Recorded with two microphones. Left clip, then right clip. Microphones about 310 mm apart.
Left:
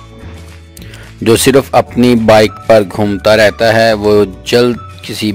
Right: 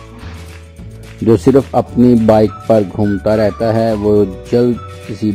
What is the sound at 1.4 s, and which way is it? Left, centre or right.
Speech, left.